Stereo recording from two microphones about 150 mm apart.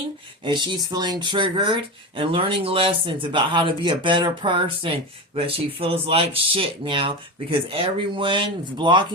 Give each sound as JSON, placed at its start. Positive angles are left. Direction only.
{"t": 0.4, "sound": "speech", "side_deg": -30}